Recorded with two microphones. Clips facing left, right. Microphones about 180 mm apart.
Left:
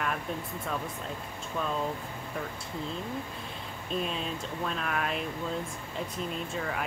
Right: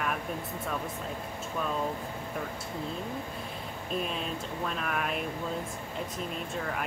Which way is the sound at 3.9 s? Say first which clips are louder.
Left 1 dB; 5° right (ahead or behind).